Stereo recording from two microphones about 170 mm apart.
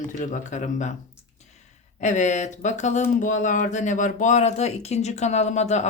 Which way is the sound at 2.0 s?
45° left (ahead or behind).